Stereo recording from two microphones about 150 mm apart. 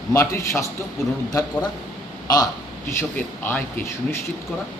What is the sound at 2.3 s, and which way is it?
Speech, 25° left (ahead or behind).